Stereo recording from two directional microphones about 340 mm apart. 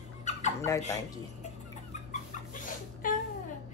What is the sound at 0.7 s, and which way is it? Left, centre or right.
Speech, centre.